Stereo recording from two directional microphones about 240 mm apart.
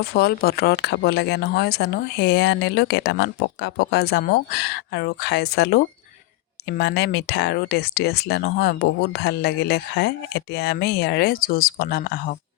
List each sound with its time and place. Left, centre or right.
0.0 s speech: left